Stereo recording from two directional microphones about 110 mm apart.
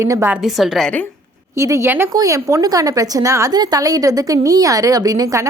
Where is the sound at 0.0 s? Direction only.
25° right (ahead or behind).